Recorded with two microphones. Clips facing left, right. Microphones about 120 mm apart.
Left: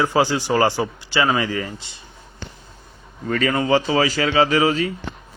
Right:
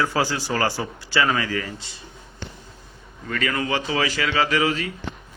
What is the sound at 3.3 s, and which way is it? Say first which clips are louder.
A man's voice: left 6 dB; 30° left (ahead or behind).